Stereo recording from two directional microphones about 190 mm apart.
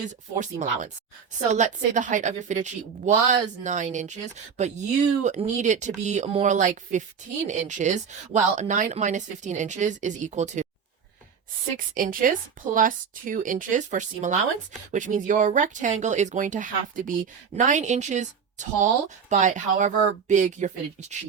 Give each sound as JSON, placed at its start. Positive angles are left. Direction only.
{"t": 0.3, "sound": "a woman's voice", "side_deg": -40}
{"t": 11.8, "sound": "a woman's voice", "side_deg": -45}